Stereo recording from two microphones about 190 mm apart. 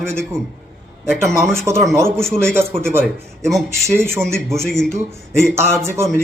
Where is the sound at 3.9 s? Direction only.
10° right (ahead or behind).